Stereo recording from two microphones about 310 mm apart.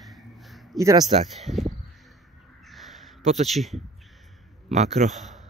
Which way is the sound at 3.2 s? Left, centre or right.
Right.